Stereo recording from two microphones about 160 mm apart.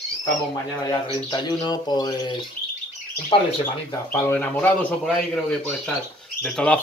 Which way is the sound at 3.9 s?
15° left (ahead or behind).